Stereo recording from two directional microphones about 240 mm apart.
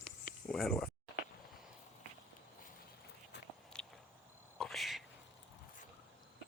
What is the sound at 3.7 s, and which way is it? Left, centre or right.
Walk, centre.